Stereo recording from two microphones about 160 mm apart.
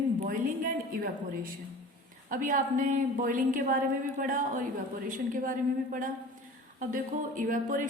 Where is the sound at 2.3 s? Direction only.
55° right (ahead or behind).